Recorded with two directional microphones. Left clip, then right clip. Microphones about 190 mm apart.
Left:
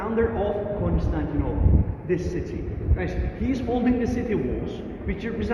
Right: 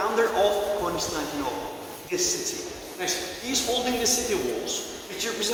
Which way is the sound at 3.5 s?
60° right (ahead or behind).